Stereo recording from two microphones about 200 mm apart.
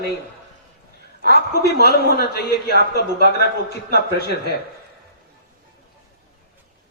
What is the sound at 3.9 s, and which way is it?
Speech, 50° left (ahead or behind).